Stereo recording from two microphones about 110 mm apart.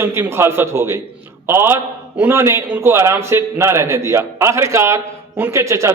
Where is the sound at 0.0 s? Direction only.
20° right (ahead or behind).